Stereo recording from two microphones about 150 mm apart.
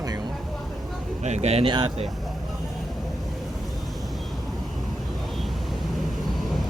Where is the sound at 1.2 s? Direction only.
45° right (ahead or behind).